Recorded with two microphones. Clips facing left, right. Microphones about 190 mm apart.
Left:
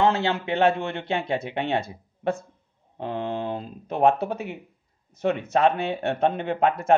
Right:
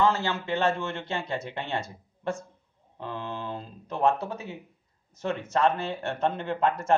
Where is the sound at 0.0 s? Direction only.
60° left (ahead or behind).